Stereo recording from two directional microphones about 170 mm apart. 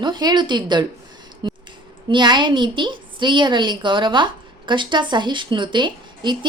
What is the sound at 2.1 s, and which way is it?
A woman's voice, 25° right (ahead or behind).